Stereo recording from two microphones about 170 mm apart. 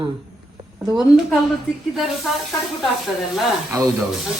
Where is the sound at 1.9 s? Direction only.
Centre (ahead or behind).